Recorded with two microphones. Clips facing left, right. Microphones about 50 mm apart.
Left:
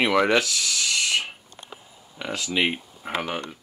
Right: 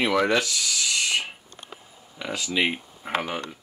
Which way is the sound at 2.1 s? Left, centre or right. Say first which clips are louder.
Even; centre.